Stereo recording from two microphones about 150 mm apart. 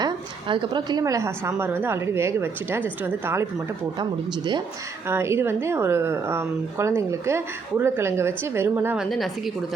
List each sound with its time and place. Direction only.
0.0 s a woman's voice: 35° right (ahead or behind); by 3.4 s 15° right (ahead or behind)
5.0 s a woman's voice: 15° right (ahead or behind)
9.0 s a woman's voice: centre (ahead or behind)